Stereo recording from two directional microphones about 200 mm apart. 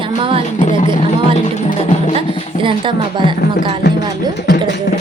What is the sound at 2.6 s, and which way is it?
Speech, 25° right (ahead or behind).